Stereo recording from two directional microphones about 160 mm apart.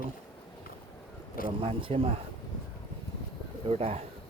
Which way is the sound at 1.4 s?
35° right (ahead or behind).